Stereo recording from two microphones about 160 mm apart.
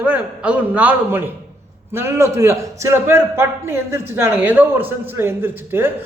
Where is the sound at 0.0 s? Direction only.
10° right (ahead or behind).